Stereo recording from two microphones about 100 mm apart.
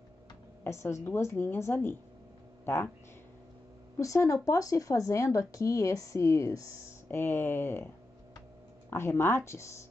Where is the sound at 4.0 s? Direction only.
30° left (ahead or behind).